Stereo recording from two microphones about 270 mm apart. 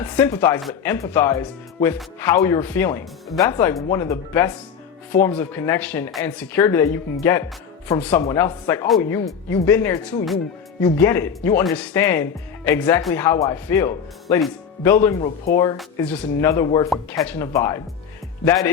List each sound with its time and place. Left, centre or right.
0.0 s speech: centre
16.9 s speech: centre